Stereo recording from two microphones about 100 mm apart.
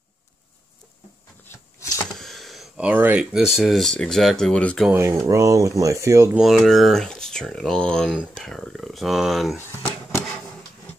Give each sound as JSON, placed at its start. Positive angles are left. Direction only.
{"t": 1.4, "sound": "shuffling cards", "side_deg": 25}
{"t": 2.1, "sound": "a sound", "side_deg": 0}
{"t": 2.8, "sound": "speech", "side_deg": -15}
{"t": 3.3, "sound": "speech", "side_deg": -5}
{"t": 4.9, "sound": "speech", "side_deg": -25}
{"t": 6.3, "sound": "speech", "side_deg": 0}